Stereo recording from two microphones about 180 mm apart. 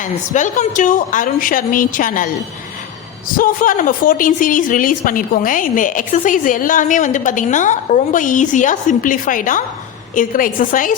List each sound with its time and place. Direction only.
0.0 s a woman's voice: 45° left (ahead or behind)